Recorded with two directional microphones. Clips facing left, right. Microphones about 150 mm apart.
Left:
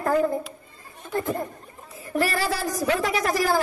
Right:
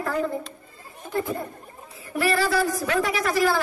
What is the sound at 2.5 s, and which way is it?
Speech, 40° left (ahead or behind).